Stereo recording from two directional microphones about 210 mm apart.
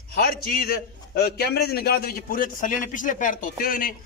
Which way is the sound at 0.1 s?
45° left (ahead or behind).